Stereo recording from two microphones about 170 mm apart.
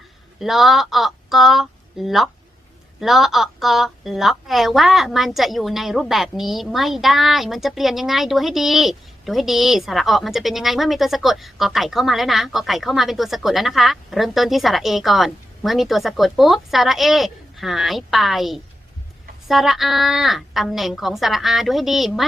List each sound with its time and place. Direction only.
0.3 s a woman's voice: centre (ahead or behind)